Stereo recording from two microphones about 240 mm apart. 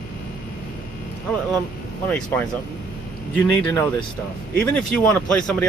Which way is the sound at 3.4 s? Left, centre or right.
Centre.